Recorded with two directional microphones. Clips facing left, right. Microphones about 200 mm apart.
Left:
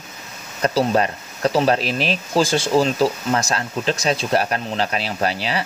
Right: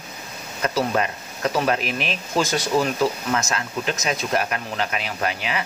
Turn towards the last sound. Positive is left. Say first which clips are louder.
# left 3 dB
turn(degrees=35)  # may be behind; listen again after turning